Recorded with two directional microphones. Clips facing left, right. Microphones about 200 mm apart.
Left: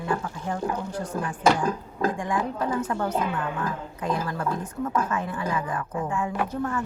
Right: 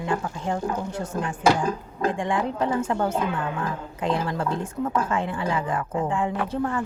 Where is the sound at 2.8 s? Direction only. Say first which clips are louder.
Right 2 dB; 25° right (ahead or behind).